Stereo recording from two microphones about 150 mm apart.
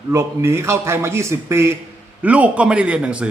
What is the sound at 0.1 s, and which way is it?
A man's voice, 20° right (ahead or behind).